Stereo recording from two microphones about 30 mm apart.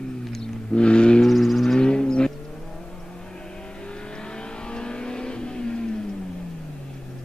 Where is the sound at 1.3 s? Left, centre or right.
Centre.